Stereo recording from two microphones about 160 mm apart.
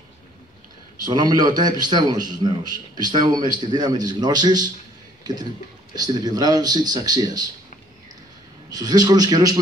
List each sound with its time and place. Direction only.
1.0 s a man's voice: 25° right (ahead or behind)
8.6 s a man's voice: 25° right (ahead or behind)